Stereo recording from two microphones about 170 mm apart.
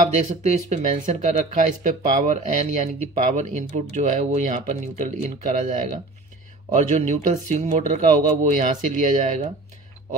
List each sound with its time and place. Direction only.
0.1 s speech: 45° right (ahead or behind)